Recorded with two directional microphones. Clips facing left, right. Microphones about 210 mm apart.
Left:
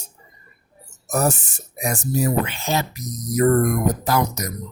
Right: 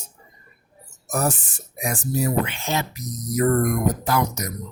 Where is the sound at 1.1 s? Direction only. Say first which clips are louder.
Left 3 dB; 40° left (ahead or behind).